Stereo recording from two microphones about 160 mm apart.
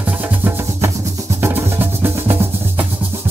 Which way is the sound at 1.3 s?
15° right (ahead or behind).